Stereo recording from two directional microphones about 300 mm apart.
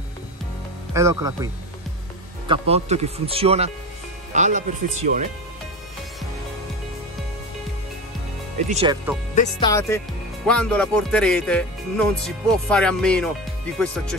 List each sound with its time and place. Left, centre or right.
0.9 s speech: centre
8.6 s speech: right
9.3 s speech: left
9.7 s speech: centre